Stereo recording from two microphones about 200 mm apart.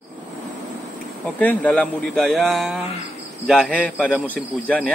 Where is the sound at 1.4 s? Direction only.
5° left (ahead or behind).